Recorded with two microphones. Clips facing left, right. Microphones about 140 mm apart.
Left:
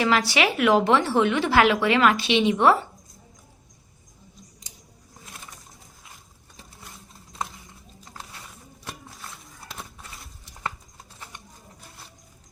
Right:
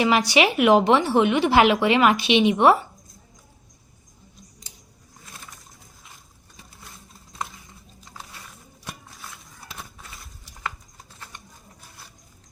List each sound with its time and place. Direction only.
0.0 s a woman's voice: 15° right (ahead or behind)